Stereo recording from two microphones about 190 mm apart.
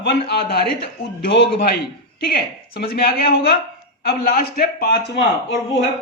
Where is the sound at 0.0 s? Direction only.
55° left (ahead or behind).